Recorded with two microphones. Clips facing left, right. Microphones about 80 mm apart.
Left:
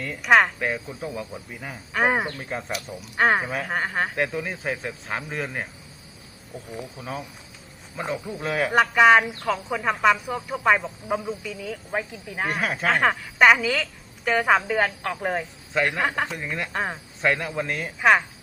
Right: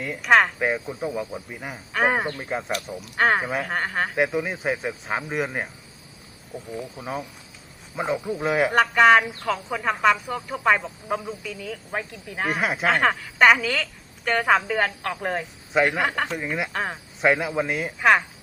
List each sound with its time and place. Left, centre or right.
0.2 s speech: centre
1.9 s speech: centre
2.3 s speech: centre
3.0 s speech: centre
4.1 s speech: centre
6.9 s speech: centre
8.7 s speech: centre
15.7 s speech: centre
16.0 s speech: centre
16.4 s speech: centre
16.7 s speech: centre
17.2 s speech: centre